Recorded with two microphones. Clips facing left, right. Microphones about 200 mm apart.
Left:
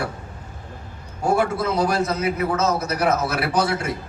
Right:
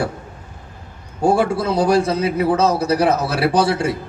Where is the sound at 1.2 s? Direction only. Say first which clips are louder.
Right 4 dB; 30° right (ahead or behind).